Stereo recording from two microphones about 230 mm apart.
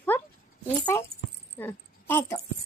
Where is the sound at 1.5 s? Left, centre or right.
Centre.